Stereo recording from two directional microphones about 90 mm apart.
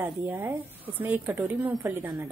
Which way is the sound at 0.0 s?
25° right (ahead or behind).